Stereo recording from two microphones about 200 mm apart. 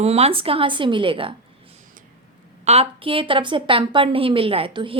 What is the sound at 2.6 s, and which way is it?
A woman's voice, 30° right (ahead or behind).